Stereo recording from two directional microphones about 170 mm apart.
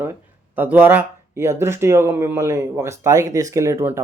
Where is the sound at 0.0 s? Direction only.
10° right (ahead or behind).